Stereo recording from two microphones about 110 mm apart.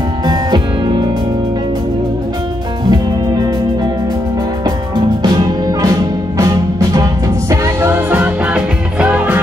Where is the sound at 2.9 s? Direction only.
40° right (ahead or behind).